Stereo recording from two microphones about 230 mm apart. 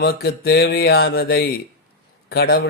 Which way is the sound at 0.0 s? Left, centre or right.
Left.